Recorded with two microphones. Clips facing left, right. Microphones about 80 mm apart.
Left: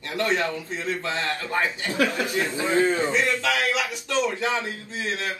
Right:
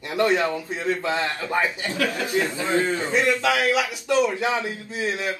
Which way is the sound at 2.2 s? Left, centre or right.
Right.